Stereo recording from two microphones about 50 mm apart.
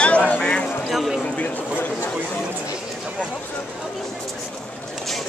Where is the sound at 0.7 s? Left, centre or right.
Centre.